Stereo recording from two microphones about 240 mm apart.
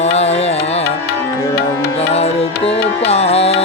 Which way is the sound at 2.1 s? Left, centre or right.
Left.